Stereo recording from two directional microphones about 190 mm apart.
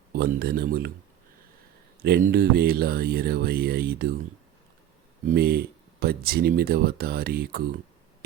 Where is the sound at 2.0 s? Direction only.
55° right (ahead or behind).